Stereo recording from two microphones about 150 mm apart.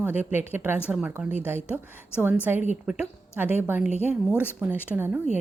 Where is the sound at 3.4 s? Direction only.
15° right (ahead or behind).